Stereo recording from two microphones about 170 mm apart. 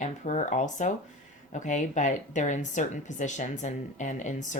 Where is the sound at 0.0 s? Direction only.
45° left (ahead or behind).